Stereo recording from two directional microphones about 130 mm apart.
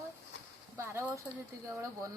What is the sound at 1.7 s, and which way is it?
Speech, 25° right (ahead or behind).